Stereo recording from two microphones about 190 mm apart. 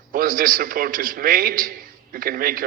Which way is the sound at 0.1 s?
50° right (ahead or behind).